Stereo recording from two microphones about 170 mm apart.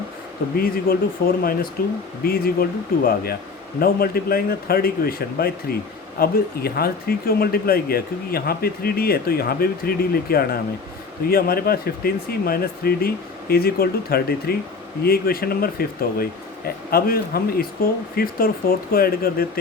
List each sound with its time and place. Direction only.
0.5 s speech: 60° left (ahead or behind)